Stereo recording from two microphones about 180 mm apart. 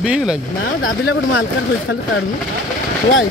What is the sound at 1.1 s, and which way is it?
Speech, 90° left.